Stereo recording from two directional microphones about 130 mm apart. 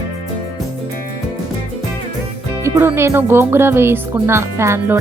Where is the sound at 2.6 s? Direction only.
20° right (ahead or behind).